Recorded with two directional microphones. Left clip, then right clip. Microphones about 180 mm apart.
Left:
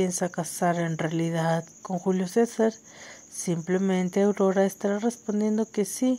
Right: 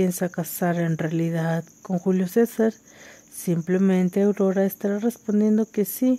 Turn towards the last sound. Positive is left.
turn(degrees=-35)  # may be behind; listen again after turning